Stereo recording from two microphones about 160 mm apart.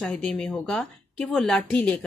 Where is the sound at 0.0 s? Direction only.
Centre (ahead or behind).